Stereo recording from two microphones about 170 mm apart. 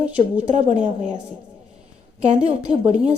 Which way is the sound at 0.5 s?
40° right (ahead or behind).